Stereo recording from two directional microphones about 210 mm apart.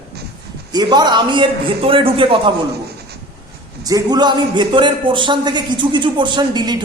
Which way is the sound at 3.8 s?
20° right (ahead or behind).